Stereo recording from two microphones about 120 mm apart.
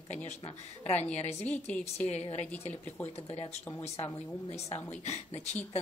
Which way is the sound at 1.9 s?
65° left (ahead or behind).